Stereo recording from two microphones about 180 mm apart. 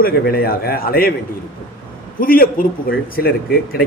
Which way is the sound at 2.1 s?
55° left (ahead or behind).